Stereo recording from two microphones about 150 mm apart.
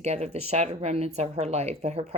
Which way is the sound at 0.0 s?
50° right (ahead or behind).